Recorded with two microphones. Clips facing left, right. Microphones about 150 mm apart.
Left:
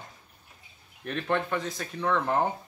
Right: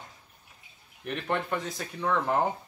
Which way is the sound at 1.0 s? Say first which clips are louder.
Left 2 dB; 10° right (ahead or behind).